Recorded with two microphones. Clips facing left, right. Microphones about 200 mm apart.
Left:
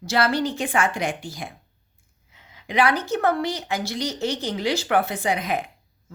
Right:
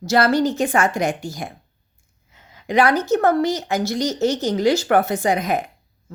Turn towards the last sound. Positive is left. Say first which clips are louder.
# right 5 dB
turn(degrees=-45)  # may be behind; listen again after turning